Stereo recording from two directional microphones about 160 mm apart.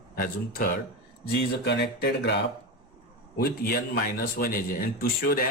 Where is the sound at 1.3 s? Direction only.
90° left.